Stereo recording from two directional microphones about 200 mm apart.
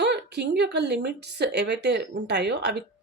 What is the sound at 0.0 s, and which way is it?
Speech, 55° right (ahead or behind).